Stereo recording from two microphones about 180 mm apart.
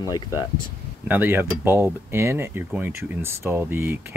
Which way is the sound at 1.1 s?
10° right (ahead or behind).